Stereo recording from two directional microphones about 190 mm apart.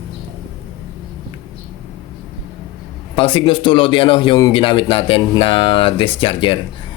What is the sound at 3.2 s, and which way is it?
Speech, 25° left (ahead or behind).